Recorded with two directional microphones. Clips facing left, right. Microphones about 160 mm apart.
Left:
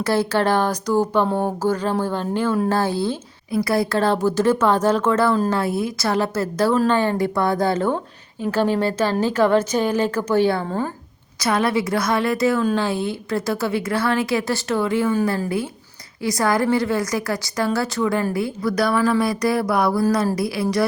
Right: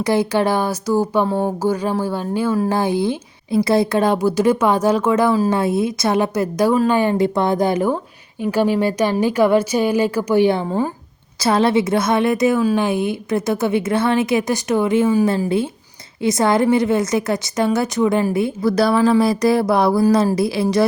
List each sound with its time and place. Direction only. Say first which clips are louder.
0.0 s speech: right 2 dB; 15° right (ahead or behind)
5.5 s speech: right 4 dB; 20° right (ahead or behind)
11.3 s a woman's voice: right 4 dB; 30° right (ahead or behind)